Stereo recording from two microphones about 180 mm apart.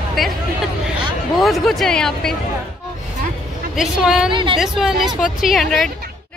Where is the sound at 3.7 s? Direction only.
Centre (ahead or behind).